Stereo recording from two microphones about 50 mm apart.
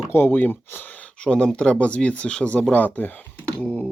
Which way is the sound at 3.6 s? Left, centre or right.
Left.